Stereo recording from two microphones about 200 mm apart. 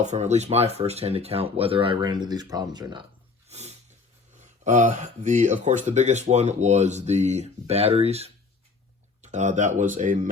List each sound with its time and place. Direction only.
0.0 s speech: 35° right (ahead or behind)
3.5 s wild animals: 35° right (ahead or behind)
4.4 s speech: 35° right (ahead or behind)